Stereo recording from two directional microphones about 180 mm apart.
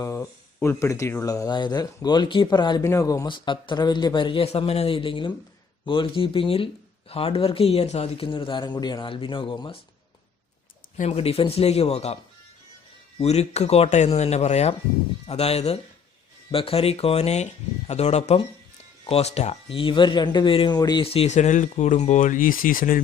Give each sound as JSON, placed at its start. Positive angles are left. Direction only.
{"t": 0.0, "sound": "speech", "side_deg": 15}
{"t": 10.9, "sound": "speech", "side_deg": 35}